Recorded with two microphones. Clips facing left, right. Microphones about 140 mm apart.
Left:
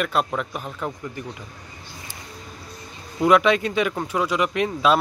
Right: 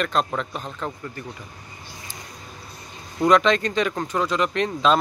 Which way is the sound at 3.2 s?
10° left (ahead or behind).